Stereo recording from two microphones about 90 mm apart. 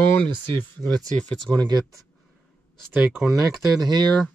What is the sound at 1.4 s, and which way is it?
Speech, 50° right (ahead or behind).